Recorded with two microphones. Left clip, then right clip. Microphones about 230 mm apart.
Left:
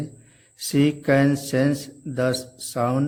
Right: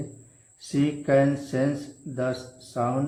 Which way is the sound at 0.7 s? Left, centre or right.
Left.